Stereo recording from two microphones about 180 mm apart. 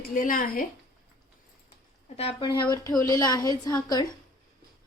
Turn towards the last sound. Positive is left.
turn(degrees=20)  # may be behind; listen again after turning